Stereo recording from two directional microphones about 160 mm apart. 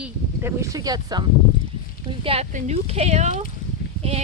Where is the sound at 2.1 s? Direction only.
35° right (ahead or behind).